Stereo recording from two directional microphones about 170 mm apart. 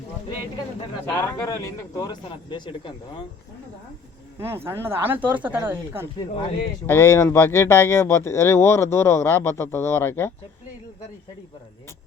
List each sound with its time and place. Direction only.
1.0 s speech: 10° left (ahead or behind); by 2.9 s 30° left (ahead or behind)
4.4 s speech: 15° right (ahead or behind)
6.8 s speech: 15° left (ahead or behind)